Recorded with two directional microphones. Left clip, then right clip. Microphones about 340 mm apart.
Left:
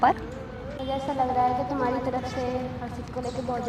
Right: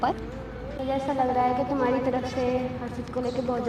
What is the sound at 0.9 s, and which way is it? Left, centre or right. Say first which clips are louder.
A woman's voice: right 1 dB; right.